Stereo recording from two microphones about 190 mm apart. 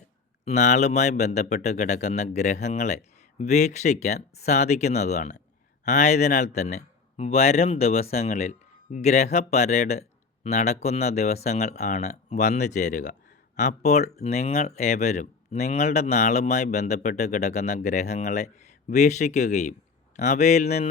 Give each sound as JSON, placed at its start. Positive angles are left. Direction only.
{"t": 0.4, "sound": "a man's voice", "side_deg": 40}